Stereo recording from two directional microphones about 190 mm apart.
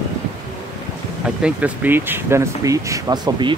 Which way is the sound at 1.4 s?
10° right (ahead or behind).